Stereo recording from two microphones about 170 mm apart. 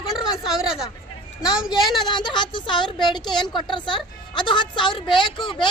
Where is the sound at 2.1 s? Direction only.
25° left (ahead or behind).